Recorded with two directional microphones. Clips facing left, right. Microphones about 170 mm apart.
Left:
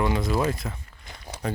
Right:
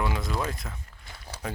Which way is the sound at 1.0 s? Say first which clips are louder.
Left 4 dB; 15° left (ahead or behind).